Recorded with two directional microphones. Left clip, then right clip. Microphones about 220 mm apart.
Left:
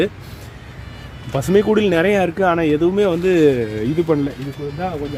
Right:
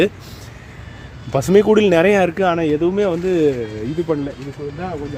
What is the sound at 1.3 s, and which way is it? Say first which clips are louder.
Speech: right 3 dB; 20° right (ahead or behind).